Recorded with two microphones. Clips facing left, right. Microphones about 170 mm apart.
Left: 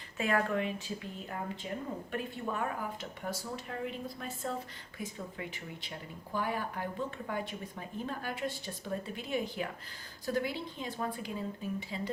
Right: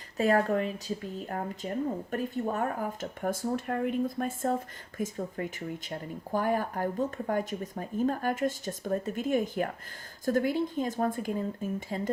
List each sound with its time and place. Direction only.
0.2 s speech: 40° right (ahead or behind)